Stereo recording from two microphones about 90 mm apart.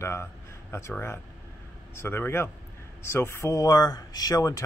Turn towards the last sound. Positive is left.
turn(degrees=40)  # may be behind; listen again after turning